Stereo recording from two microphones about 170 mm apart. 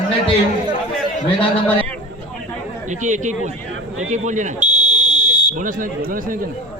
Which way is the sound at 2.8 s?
45° right (ahead or behind).